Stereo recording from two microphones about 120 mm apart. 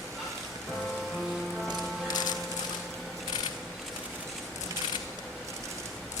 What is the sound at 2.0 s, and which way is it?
Music, 35° left (ahead or behind).